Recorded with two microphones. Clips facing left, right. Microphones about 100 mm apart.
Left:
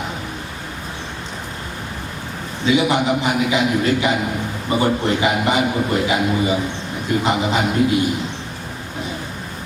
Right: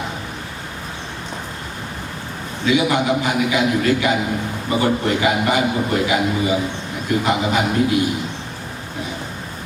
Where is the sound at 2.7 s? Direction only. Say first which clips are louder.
Even; 20° left (ahead or behind).